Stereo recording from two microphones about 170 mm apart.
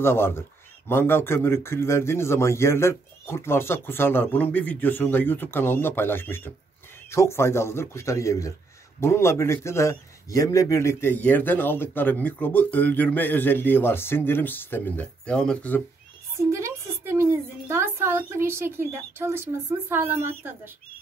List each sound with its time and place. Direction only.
0.0 s a man's voice: 15° left (ahead or behind)
16.4 s a woman's voice: 15° right (ahead or behind)